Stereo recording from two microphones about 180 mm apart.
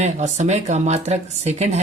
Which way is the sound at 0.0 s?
40° right (ahead or behind).